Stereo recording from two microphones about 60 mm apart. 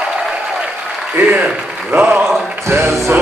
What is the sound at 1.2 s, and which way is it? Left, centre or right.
Speech, right.